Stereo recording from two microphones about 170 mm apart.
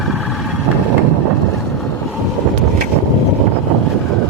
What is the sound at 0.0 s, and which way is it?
Vehicle, centre (ahead or behind).